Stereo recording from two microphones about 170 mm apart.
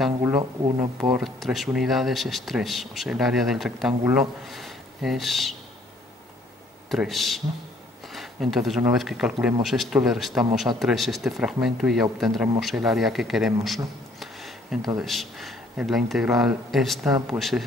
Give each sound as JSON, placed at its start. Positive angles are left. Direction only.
{"t": 0.2, "sound": "speech", "side_deg": -20}
{"t": 1.1, "sound": "speech", "side_deg": 0}
{"t": 6.9, "sound": "speech", "side_deg": 0}
{"t": 14.2, "sound": "a sound", "side_deg": 0}
{"t": 15.0, "sound": "speech", "side_deg": 0}